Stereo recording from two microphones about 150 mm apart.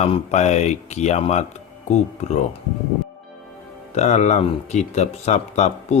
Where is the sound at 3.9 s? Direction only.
50° left (ahead or behind).